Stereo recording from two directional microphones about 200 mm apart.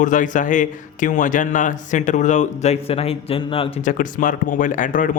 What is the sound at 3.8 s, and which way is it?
Speech, 40° left (ahead or behind).